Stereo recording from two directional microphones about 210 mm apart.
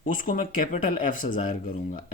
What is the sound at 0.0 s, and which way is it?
Speech, 40° left (ahead or behind).